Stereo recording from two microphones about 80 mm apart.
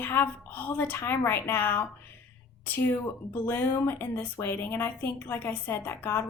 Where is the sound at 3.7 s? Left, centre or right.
Left.